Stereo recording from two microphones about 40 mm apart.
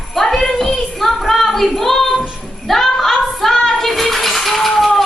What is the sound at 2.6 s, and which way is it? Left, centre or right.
Bathtub, centre.